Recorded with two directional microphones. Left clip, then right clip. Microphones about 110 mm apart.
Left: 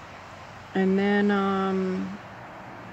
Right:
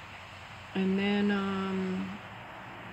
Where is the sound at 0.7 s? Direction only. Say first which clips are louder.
Left 7 dB; 35° left (ahead or behind).